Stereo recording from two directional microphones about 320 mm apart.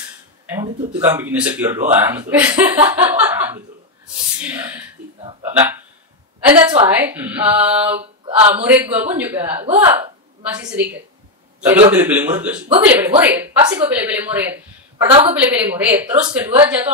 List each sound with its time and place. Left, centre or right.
0.5 s speech: centre
6.4 s speech: centre
8.0 s a sound: centre
8.6 s speech: centre
11.9 s speech: centre